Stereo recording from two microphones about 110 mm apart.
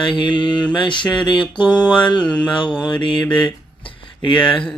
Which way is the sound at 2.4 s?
45° left (ahead or behind).